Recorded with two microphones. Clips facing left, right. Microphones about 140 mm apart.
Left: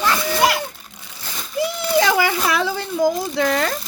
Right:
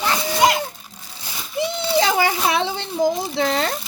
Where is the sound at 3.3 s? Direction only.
25° right (ahead or behind).